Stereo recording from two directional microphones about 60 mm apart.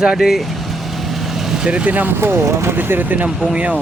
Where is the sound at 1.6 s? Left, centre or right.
Right.